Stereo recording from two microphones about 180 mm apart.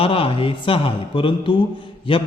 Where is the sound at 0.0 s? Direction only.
30° left (ahead or behind).